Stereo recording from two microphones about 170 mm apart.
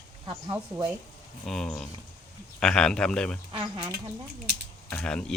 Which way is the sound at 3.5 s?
25° right (ahead or behind).